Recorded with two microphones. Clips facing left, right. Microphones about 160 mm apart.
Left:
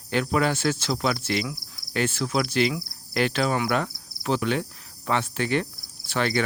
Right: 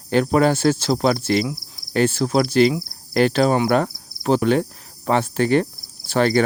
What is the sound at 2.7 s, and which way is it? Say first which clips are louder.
Cricket: right 7 dB; 40° right (ahead or behind).